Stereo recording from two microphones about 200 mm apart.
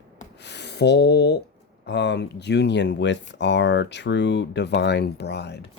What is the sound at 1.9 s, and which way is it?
Speech, 55° left (ahead or behind).